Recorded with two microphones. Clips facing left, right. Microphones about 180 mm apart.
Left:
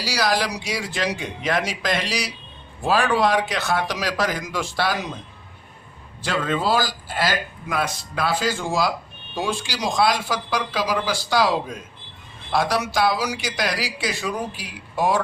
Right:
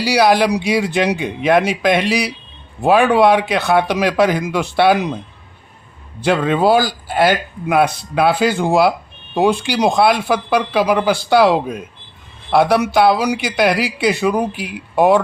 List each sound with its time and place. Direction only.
0.0 s a man's voice: 60° right (ahead or behind)
6.2 s a man's voice: 65° right (ahead or behind)